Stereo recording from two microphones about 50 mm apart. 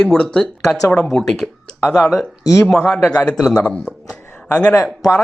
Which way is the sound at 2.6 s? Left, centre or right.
Centre.